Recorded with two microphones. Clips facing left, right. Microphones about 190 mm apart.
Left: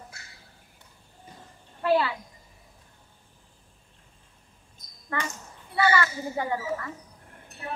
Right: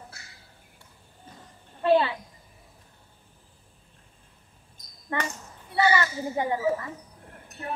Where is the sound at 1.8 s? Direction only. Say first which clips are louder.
Right 2 dB; 25° right (ahead or behind).